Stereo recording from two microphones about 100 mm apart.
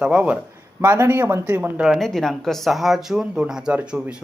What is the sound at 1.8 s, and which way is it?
Speech, centre (ahead or behind).